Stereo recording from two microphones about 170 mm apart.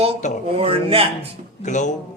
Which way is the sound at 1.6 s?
45° left (ahead or behind).